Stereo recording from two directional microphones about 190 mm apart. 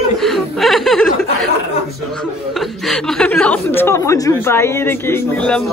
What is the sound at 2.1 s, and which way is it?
Speech, centre (ahead or behind).